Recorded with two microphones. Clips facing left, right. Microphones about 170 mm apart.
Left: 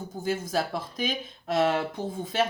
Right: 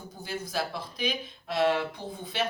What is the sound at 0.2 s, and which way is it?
Speech, 45° left (ahead or behind).